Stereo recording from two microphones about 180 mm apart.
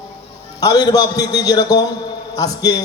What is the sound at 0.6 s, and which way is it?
A man's voice, 20° left (ahead or behind).